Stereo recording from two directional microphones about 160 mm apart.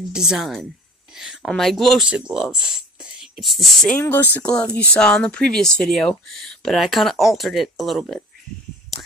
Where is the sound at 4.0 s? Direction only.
10° left (ahead or behind).